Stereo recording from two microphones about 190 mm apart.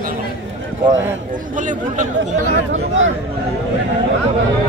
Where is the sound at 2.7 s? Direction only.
90° right.